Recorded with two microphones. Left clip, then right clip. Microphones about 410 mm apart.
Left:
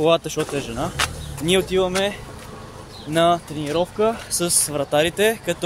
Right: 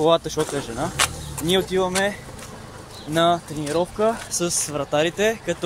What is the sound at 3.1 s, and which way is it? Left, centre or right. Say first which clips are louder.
Speech: left 2 dB; left.